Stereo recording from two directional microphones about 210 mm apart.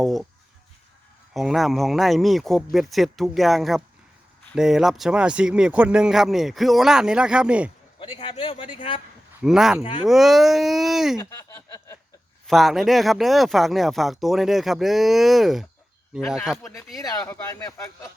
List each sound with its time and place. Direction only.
0.0 s speech: centre (ahead or behind)
1.3 s speech: centre (ahead or behind)
7.9 s speech: 25° left (ahead or behind)
9.4 s speech: centre (ahead or behind)
11.2 s a sound: 15° left (ahead or behind)
12.5 s speech: centre (ahead or behind)
16.6 s speech: 15° left (ahead or behind)